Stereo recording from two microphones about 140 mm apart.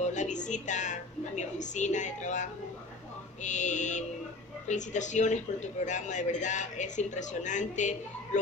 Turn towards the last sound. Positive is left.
turn(degrees=60)  # may be behind; listen again after turning